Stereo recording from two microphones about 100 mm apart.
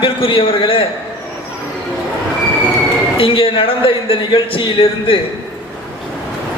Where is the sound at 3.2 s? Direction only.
65° left (ahead or behind).